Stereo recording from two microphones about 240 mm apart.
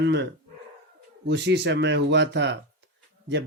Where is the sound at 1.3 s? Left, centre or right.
Right.